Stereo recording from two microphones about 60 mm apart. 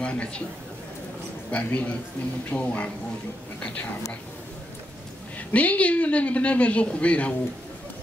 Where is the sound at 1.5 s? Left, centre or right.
Left.